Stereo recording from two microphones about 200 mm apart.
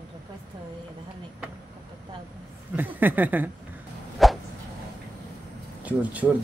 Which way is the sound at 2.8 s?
10° right (ahead or behind).